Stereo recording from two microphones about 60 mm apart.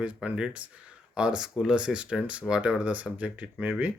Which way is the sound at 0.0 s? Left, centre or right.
Right.